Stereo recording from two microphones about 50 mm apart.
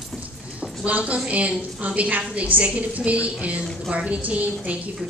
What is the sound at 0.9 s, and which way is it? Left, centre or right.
A woman's voice, right.